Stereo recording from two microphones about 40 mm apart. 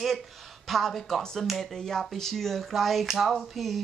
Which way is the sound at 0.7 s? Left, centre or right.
Centre.